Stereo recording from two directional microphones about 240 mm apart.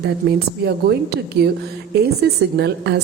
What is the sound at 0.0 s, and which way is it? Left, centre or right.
Speech, right.